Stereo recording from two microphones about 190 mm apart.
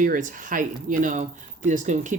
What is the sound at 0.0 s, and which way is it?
Speech, 45° right (ahead or behind).